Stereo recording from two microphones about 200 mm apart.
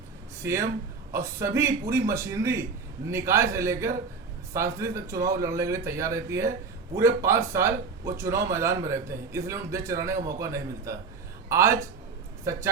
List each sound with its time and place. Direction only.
0.3 s a man's voice: 15° right (ahead or behind)